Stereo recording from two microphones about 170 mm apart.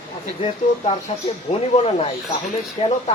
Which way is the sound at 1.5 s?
35° left (ahead or behind).